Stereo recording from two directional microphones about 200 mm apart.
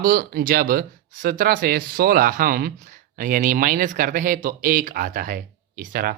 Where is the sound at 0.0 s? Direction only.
45° right (ahead or behind).